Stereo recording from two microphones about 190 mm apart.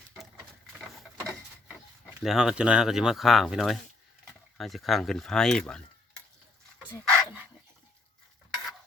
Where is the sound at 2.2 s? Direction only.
Centre (ahead or behind).